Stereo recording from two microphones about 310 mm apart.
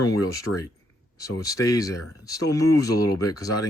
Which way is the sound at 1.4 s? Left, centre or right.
Centre.